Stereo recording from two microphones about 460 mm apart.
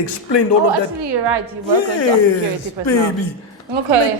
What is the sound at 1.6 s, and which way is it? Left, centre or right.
A woman's voice, left.